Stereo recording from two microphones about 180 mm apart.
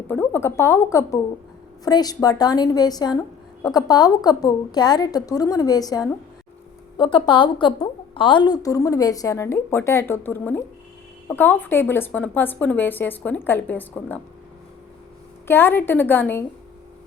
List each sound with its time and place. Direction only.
0.1 s a woman's voice: 10° left (ahead or behind)
15.4 s speech: 10° left (ahead or behind)